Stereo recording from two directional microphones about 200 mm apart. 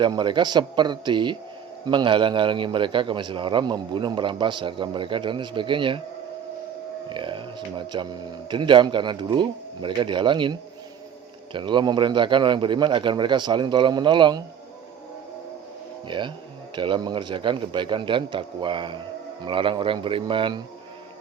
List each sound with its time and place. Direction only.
0.0 s a man's voice: 20° right (ahead or behind)
7.1 s a man's voice: 25° right (ahead or behind)
16.0 s a man's voice: 25° right (ahead or behind)